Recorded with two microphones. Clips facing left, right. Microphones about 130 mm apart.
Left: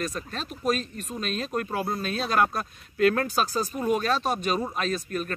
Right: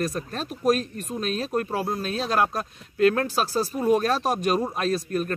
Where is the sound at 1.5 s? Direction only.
35° right (ahead or behind).